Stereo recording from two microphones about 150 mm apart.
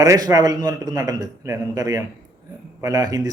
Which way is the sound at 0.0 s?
25° right (ahead or behind).